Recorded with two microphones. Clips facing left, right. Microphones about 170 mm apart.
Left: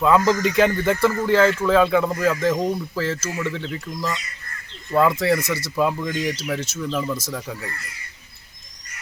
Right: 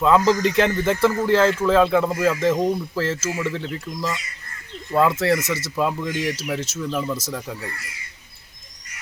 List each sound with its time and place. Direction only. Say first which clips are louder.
0.0 s speech: right 1 dB; centre (ahead or behind)